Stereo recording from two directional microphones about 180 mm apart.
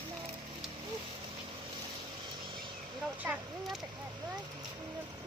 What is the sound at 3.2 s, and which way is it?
Speech, 10° right (ahead or behind).